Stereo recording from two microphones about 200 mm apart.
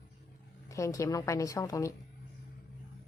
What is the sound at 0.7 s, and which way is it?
A woman's voice, 15° left (ahead or behind).